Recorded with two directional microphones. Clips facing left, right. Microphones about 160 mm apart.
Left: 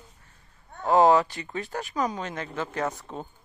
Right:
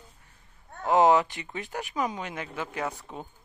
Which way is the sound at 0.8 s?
20° right (ahead or behind).